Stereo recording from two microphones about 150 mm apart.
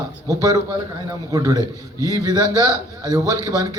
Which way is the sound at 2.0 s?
20° left (ahead or behind).